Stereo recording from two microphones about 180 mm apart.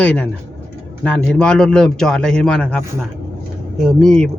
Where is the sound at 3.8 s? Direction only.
5° left (ahead or behind).